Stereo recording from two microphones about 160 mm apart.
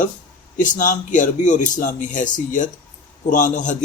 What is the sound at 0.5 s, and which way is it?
A man's voice, 55° left (ahead or behind).